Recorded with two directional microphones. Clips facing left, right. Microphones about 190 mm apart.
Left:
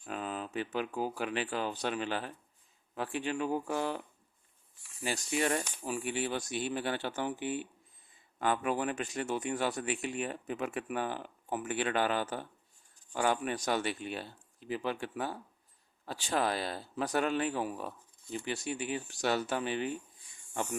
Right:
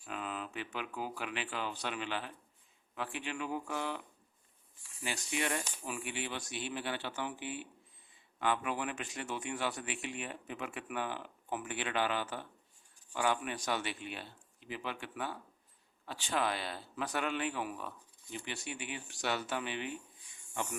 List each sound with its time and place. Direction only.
0.0 s speech: 40° left (ahead or behind)
5.0 s speech: 40° left (ahead or behind)